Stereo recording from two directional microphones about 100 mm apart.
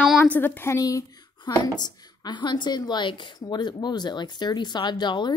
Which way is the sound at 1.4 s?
45° left (ahead or behind).